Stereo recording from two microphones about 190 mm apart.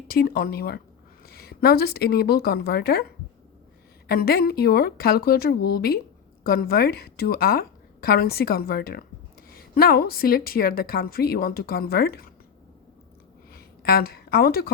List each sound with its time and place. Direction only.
0.1 s a woman's voice: 50° left (ahead or behind)
4.1 s a woman's voice: 55° left (ahead or behind)
13.5 s a sound: 55° left (ahead or behind)